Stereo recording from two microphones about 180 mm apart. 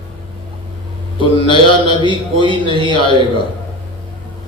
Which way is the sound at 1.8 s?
30° right (ahead or behind).